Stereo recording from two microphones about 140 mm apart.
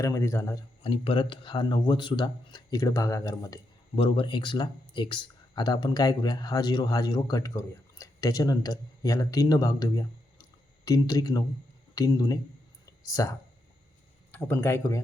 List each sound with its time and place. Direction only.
0.0 s speech: 20° left (ahead or behind)
0.8 s speech: 40° left (ahead or behind)
3.9 s speech: 40° left (ahead or behind); by 13.3 s 25° left (ahead or behind)
14.3 s speech: 15° left (ahead or behind)